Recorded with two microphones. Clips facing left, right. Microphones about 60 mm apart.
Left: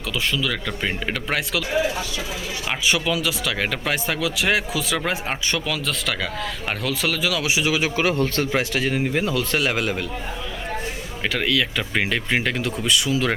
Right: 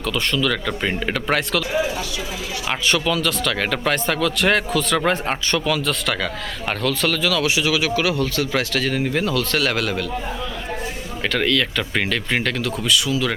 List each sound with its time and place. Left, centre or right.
0.1 s speech: centre
2.6 s speech: centre; by 8.4 s left
8.5 s speech: centre
11.2 s speech: centre
12.6 s speech: left